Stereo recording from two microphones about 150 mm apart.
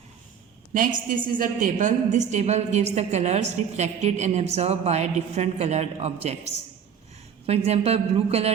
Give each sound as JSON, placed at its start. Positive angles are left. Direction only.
{"t": 0.7, "sound": "a woman's voice", "side_deg": -65}